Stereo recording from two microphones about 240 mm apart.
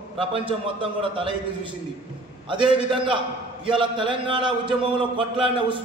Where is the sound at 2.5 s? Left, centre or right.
Right.